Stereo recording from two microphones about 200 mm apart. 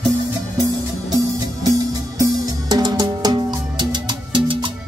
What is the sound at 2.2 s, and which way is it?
Music, 20° right (ahead or behind).